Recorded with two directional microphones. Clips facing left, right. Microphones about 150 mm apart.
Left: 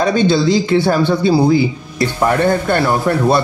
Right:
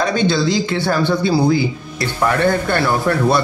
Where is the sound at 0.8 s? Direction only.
20° left (ahead or behind).